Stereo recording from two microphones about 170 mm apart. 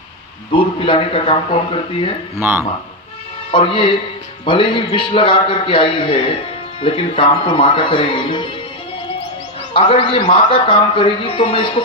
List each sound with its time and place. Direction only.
0.5 s a man's voice: 30° left (ahead or behind)
2.4 s speech: 15° right (ahead or behind)
3.5 s a man's voice: 30° left (ahead or behind)
9.7 s a man's voice: 30° left (ahead or behind)